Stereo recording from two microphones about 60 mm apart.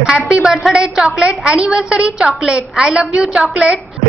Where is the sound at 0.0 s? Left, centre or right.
Centre.